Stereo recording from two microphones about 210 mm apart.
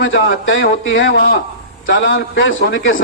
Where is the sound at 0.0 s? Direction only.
65° left (ahead or behind).